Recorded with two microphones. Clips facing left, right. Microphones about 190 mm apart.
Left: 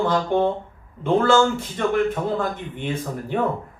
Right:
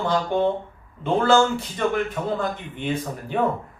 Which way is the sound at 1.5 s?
50° left (ahead or behind).